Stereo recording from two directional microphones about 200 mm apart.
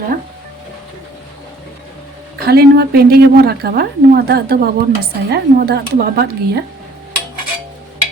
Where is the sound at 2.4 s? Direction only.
50° right (ahead or behind).